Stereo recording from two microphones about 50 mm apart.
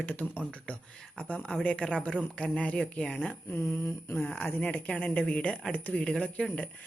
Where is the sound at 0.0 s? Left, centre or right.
Left.